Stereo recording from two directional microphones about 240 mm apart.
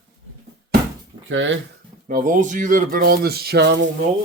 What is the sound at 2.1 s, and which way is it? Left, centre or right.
Speech, right.